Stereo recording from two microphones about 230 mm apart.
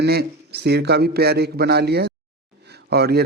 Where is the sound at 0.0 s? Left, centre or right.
Right.